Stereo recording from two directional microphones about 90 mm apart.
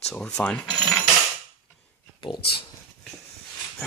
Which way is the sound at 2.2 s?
60° left (ahead or behind).